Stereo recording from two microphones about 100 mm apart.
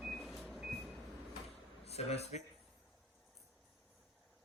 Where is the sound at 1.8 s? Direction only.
90° left.